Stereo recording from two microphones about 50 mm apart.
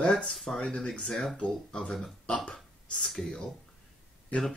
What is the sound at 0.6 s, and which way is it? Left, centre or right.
Speech, centre.